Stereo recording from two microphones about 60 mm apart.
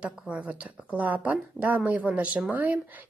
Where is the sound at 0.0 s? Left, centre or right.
Right.